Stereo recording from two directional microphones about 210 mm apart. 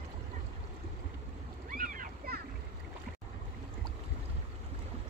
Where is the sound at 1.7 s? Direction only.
40° right (ahead or behind).